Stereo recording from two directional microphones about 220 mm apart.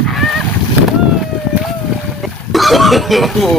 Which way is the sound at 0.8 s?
Centre (ahead or behind).